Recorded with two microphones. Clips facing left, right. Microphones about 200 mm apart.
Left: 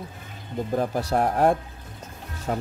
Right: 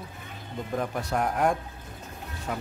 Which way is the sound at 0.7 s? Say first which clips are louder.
Left 5 dB; 35° left (ahead or behind).